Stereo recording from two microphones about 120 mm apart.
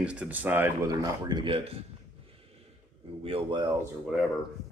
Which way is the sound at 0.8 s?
35° right (ahead or behind).